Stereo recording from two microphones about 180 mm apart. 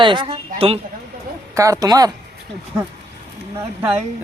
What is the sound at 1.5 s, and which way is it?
Speech, 15° right (ahead or behind).